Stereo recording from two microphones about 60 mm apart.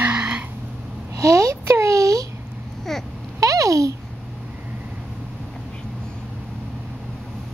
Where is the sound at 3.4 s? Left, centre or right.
Right.